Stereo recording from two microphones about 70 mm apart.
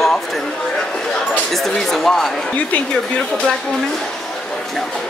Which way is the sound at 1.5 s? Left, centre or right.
Centre.